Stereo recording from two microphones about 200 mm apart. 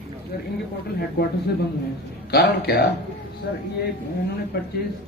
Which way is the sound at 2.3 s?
50° left (ahead or behind).